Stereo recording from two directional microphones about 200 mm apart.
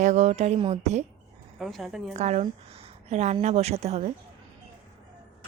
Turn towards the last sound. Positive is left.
turn(degrees=-30)  # may be behind; listen again after turning